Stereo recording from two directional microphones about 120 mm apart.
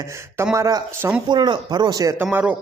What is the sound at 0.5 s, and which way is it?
Speech, 25° right (ahead or behind).